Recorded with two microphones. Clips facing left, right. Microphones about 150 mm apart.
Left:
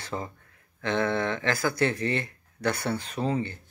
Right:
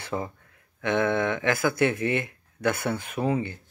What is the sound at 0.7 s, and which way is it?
Speech, 15° right (ahead or behind).